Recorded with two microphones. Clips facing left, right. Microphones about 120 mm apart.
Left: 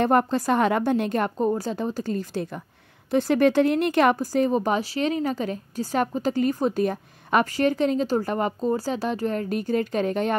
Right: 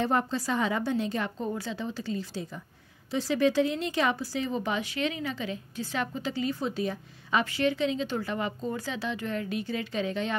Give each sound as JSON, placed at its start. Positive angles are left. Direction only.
{"t": 0.0, "sound": "a woman's voice", "side_deg": 60}